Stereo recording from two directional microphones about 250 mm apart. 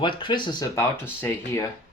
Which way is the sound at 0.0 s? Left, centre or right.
Centre.